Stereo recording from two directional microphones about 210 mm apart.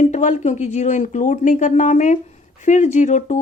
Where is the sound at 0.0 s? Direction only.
35° left (ahead or behind).